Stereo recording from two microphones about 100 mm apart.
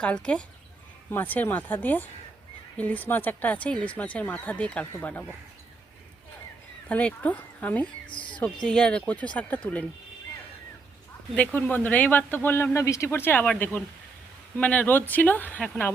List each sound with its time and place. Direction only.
0.0 s speech: 10° left (ahead or behind)
6.8 s speech: 15° left (ahead or behind)
8.0 s speech: 55° left (ahead or behind)
8.6 s speech: 10° left (ahead or behind)
11.3 s speech: 20° left (ahead or behind)